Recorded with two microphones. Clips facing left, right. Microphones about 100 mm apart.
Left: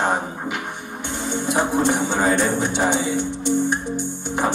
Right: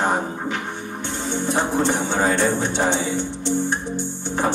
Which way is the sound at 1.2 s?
15° left (ahead or behind).